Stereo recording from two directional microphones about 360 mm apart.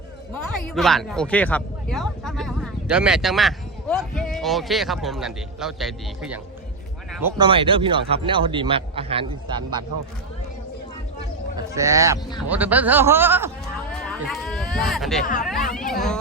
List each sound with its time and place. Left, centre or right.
0.7 s speech: centre
11.7 s speech: centre
15.2 s speech: left
15.9 s speech: centre